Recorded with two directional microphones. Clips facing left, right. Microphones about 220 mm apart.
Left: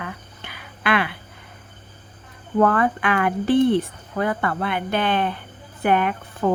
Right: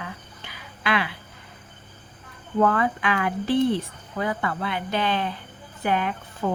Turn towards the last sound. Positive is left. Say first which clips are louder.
# left 4 dB
turn(degrees=60)  # may be behind; listen again after turning